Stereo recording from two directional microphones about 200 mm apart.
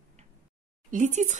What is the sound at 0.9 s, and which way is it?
Speech, 35° right (ahead or behind).